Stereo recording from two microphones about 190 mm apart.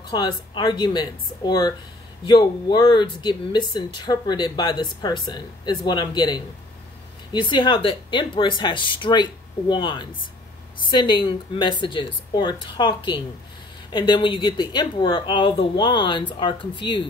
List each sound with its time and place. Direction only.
0.1 s speech: 20° left (ahead or behind)